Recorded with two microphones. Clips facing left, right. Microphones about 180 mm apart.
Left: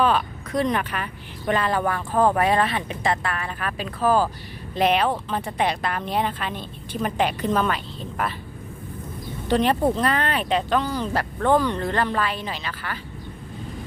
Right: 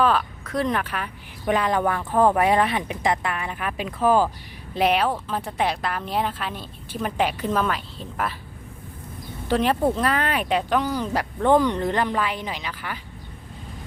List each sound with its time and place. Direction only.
0.0 s speech: centre (ahead or behind)
1.7 s speech: 15° right (ahead or behind)
9.5 s speech: 5° right (ahead or behind)